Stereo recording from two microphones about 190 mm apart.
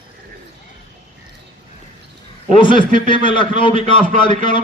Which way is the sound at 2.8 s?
25° left (ahead or behind).